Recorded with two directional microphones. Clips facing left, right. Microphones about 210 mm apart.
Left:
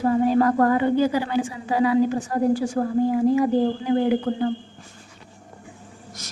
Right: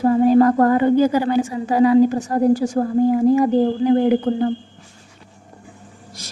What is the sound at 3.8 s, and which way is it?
Speech, 30° right (ahead or behind).